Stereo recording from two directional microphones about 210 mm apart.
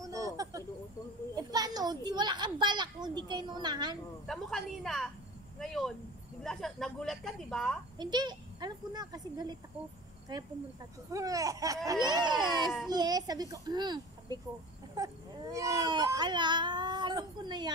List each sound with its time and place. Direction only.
0.0 s a sound: 15° right (ahead or behind)
1.3 s a child's voice: 20° right (ahead or behind)
4.3 s speech: centre (ahead or behind)
8.0 s speech: 20° right (ahead or behind)
11.1 s speech: 15° right (ahead or behind)